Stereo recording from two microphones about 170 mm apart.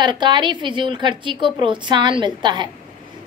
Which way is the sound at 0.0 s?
25° right (ahead or behind).